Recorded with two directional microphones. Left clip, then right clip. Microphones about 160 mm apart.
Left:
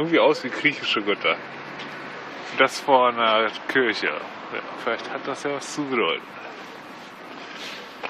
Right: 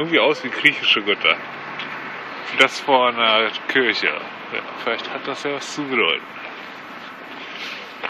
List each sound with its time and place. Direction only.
0.0 s speech: 20° left (ahead or behind)
2.5 s speech: 5° left (ahead or behind)